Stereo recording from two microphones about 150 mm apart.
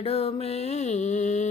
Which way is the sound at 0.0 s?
40° left (ahead or behind).